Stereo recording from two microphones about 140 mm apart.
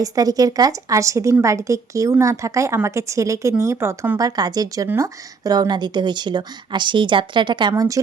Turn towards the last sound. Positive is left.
turn(degrees=-25)  # may be behind; listen again after turning